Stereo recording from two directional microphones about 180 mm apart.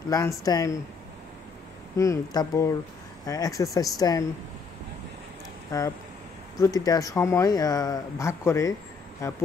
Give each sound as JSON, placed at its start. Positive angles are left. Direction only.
{"t": 0.1, "sound": "speech", "side_deg": 20}
{"t": 2.0, "sound": "speech", "side_deg": 20}
{"t": 5.7, "sound": "speech", "side_deg": 20}